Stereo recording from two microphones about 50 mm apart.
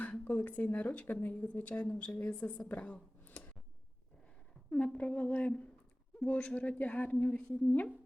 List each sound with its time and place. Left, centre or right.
0.3 s speech: left
1.0 s speech: left
1.3 s a woman's voice: left
4.7 s a woman's voice: left